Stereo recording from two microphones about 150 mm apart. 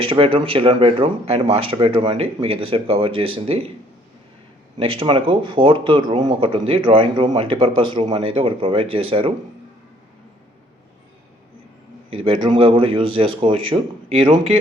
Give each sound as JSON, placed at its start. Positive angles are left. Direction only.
{"t": 0.0, "sound": "speech", "side_deg": -35}
{"t": 4.8, "sound": "speech", "side_deg": -35}
{"t": 12.1, "sound": "speech", "side_deg": -35}